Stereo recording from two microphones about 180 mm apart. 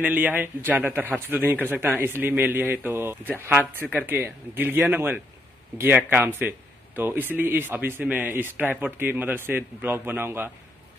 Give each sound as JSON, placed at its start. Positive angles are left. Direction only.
{"t": 0.0, "sound": "speech", "side_deg": -10}